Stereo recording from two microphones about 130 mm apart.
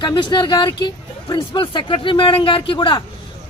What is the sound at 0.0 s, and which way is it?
Speech, 35° left (ahead or behind).